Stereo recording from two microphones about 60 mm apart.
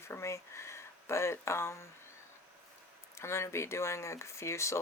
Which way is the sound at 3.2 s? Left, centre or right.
Left.